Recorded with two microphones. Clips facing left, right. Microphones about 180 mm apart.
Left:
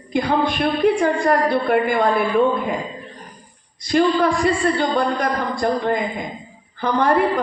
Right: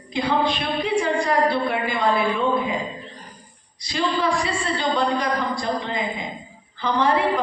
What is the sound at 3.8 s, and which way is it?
A woman's voice, 50° left (ahead or behind).